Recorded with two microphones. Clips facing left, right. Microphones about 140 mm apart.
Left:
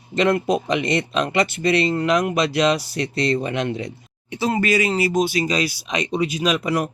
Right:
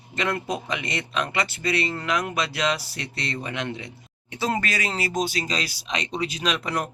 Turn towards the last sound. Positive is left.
turn(degrees=10)  # may be behind; listen again after turning